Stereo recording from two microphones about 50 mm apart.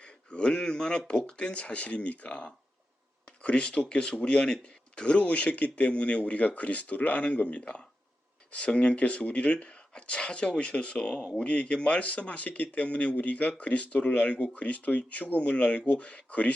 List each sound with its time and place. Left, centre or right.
0.0 s speech: centre